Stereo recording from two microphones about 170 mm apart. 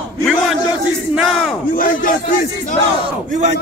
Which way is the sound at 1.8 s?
55° left (ahead or behind).